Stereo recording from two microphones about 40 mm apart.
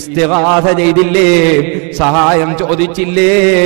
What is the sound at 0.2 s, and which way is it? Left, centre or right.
A man's voice, centre.